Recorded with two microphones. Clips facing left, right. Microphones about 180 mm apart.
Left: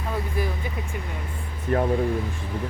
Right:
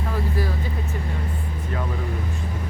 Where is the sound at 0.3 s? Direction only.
20° left (ahead or behind).